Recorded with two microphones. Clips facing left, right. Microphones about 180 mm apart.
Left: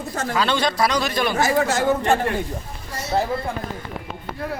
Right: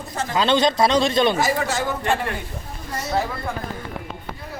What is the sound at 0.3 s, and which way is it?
A man's voice, 20° right (ahead or behind).